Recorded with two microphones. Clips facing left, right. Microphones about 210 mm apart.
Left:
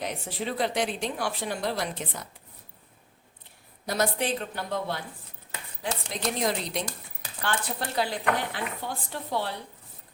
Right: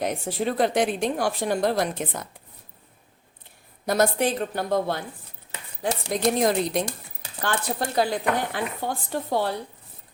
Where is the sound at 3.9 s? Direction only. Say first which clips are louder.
Right 5 dB; 45° right (ahead or behind).